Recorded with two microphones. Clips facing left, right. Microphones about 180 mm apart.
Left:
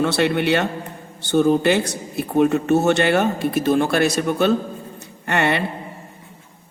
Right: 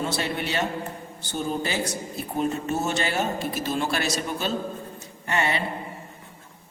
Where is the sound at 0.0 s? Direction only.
70° left (ahead or behind).